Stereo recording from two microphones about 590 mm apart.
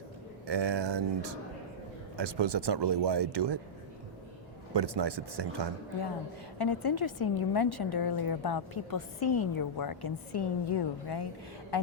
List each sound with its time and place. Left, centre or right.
0.4 s speech: right
4.7 s speech: right
6.6 s a woman's voice: left